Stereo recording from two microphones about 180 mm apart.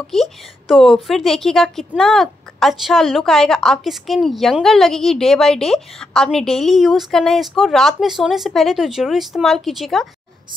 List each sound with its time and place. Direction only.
0.1 s a woman's voice: centre (ahead or behind)